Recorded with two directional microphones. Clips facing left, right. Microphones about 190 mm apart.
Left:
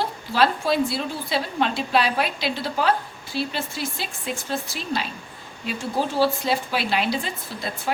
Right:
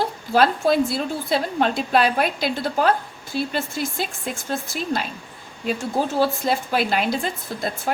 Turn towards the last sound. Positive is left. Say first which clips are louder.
# right 4 dB
turn(degrees=-45)  # may be behind; listen again after turning